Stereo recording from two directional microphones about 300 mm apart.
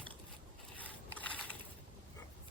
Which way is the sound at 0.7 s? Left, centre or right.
Centre.